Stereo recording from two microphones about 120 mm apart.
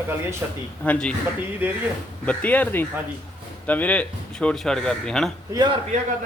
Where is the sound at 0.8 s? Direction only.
10° left (ahead or behind).